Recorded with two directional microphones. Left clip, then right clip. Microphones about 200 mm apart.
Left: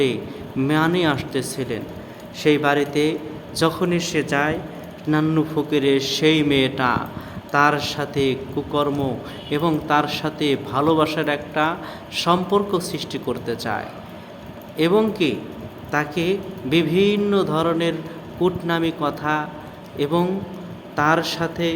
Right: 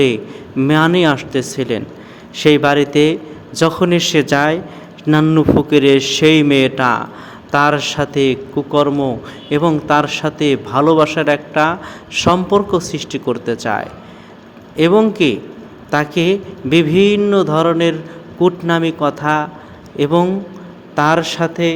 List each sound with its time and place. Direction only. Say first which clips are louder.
0.0 s a man's voice: right 7 dB; 35° right (ahead or behind)